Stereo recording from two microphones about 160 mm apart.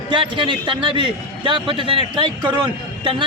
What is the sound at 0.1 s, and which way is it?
A man's voice, 30° right (ahead or behind).